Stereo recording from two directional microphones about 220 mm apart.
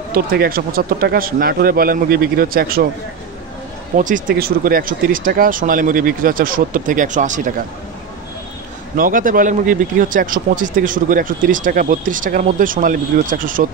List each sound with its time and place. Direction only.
0.1 s a man's voice: 40° right (ahead or behind)
3.9 s a man's voice: 35° right (ahead or behind)
8.9 s a man's voice: 40° right (ahead or behind)